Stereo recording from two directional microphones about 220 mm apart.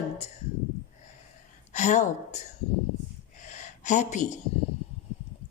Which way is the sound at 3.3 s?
30° left (ahead or behind).